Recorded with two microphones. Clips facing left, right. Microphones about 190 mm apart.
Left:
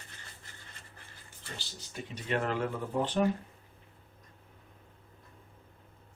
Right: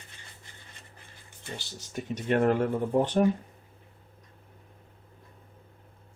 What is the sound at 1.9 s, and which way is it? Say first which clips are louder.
Speech: right 6 dB; 50° right (ahead or behind).